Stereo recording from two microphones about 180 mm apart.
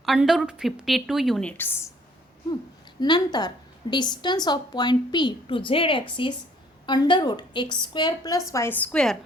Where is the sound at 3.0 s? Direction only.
25° left (ahead or behind).